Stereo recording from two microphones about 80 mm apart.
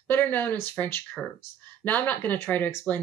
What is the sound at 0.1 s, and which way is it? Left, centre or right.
Speech, left.